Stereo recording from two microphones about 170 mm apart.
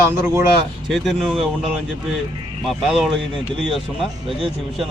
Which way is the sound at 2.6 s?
Centre (ahead or behind).